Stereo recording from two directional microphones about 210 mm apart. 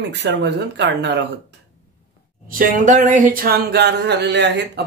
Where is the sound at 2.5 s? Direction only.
40° right (ahead or behind).